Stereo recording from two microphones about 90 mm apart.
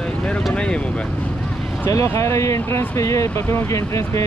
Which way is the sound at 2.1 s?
35° left (ahead or behind).